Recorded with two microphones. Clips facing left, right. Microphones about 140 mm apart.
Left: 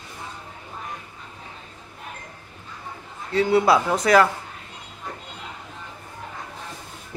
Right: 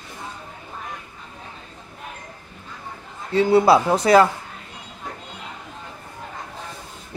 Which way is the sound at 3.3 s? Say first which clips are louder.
Right 3 dB; 30° right (ahead or behind).